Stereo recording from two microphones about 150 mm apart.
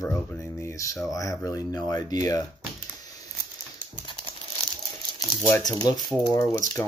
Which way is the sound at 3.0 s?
25° left (ahead or behind).